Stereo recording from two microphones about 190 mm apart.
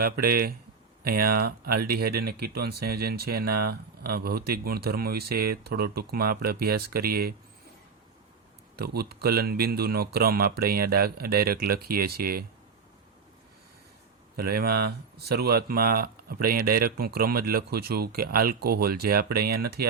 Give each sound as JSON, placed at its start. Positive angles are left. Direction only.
{"t": 0.0, "sound": "speech", "side_deg": -50}
{"t": 8.7, "sound": "speech", "side_deg": -55}
{"t": 14.3, "sound": "speech", "side_deg": -55}